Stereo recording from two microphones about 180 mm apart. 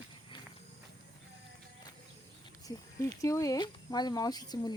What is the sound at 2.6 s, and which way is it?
Speech, 20° left (ahead or behind).